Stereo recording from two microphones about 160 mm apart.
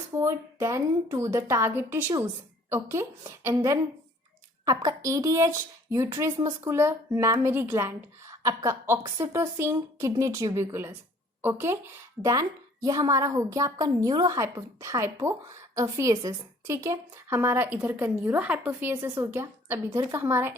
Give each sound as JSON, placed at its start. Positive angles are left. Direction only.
{"t": 0.2, "sound": "a woman's voice", "side_deg": -20}